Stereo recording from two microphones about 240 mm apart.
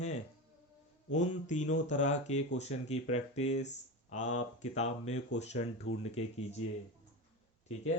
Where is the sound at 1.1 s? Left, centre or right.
Left.